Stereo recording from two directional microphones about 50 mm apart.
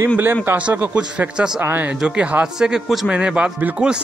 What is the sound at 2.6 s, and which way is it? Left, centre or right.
Speech, centre.